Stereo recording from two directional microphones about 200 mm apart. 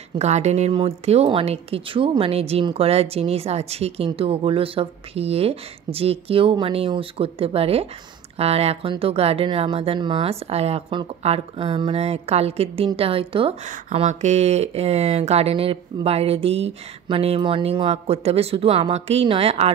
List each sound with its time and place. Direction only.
0.1 s speech: 35° right (ahead or behind)